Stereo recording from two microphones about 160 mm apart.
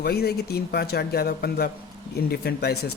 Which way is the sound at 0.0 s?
85° left.